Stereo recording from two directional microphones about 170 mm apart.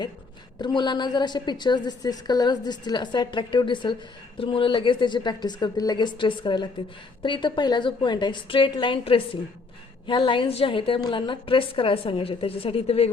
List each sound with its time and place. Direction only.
0.6 s a woman's voice: 25° left (ahead or behind)